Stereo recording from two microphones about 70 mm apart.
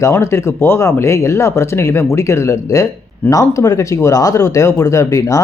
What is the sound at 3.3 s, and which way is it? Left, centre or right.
Speech, left.